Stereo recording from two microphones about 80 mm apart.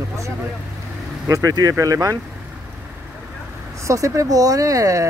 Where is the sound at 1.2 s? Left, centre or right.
Right.